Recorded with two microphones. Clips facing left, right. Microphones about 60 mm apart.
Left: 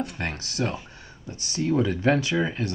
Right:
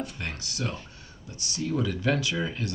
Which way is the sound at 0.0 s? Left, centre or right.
Left.